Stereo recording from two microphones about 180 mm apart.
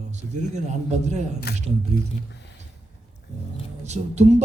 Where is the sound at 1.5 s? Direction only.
60° left (ahead or behind).